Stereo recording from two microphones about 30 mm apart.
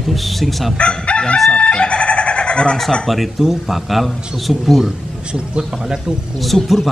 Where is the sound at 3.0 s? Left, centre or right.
Centre.